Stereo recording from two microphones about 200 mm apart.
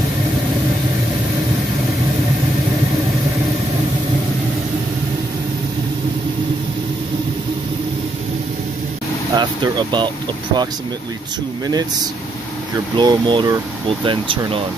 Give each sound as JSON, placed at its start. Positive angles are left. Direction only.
{"t": 9.3, "sound": "speech", "side_deg": -20}
{"t": 12.9, "sound": "speech", "side_deg": -25}